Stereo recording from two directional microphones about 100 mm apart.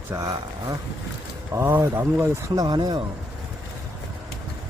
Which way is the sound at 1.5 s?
25° right (ahead or behind).